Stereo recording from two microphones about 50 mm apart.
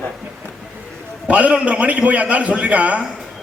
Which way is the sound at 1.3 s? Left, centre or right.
Right.